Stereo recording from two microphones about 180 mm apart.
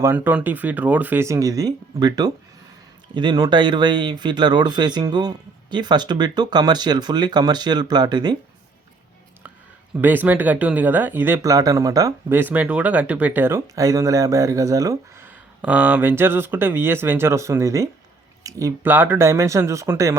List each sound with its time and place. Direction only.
0.0 s speech: 10° right (ahead or behind)
10.0 s speech: 10° right (ahead or behind)